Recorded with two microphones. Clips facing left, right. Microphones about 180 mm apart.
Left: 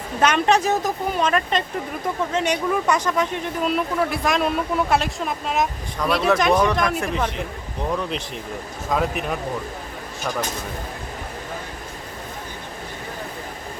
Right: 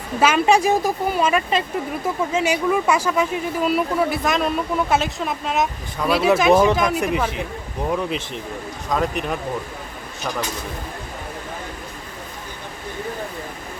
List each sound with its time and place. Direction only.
0.2 s a woman's voice: 5° right (ahead or behind)
6.5 s speech: 25° right (ahead or behind)
6.7 s speech: centre (ahead or behind)
8.9 s speech: 5° left (ahead or behind)